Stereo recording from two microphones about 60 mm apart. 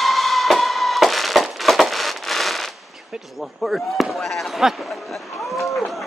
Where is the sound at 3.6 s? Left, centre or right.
Centre.